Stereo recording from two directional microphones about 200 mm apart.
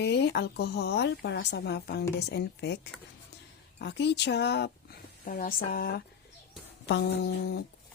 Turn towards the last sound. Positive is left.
turn(degrees=55)  # may be behind; listen again after turning